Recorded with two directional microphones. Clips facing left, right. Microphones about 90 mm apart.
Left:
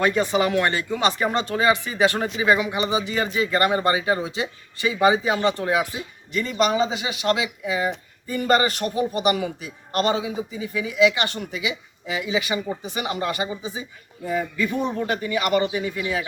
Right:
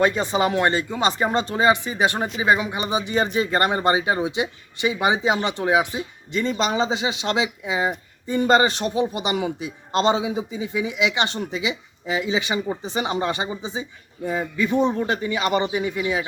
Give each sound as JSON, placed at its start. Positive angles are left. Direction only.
{"t": 0.0, "sound": "speech", "side_deg": -25}